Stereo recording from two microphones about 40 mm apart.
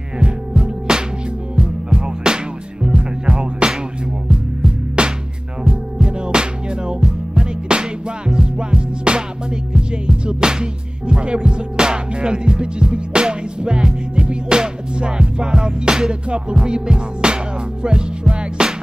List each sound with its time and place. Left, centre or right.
0.6 s music: centre